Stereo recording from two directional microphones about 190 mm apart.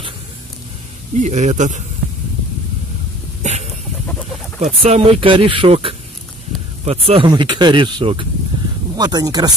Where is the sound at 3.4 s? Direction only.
35° right (ahead or behind).